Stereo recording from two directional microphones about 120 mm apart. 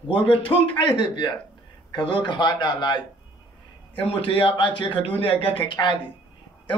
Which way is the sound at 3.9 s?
50° left (ahead or behind).